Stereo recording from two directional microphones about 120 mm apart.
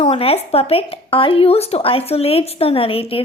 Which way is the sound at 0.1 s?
50° left (ahead or behind).